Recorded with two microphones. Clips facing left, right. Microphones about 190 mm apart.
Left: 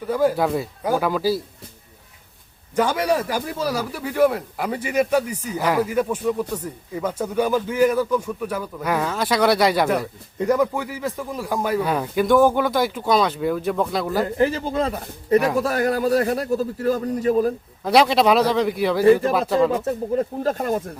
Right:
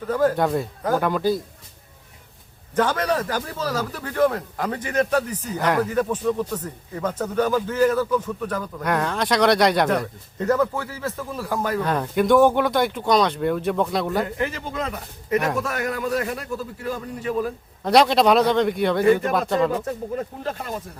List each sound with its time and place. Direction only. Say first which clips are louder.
0.1 s speech: even; 10° left (ahead or behind)
2.7 s speech: left 1 dB; 10° left (ahead or behind)
14.3 s a man's voice: left 6 dB; 35° left (ahead or behind)
15.4 s speech: left 3 dB; centre (ahead or behind)
15.6 s a man's voice: left 6 dB; 35° left (ahead or behind)
17.8 s speech: even; centre (ahead or behind)
19.7 s speech: left 4 dB; 25° left (ahead or behind)
20.4 s speech: left 7 dB; 45° left (ahead or behind)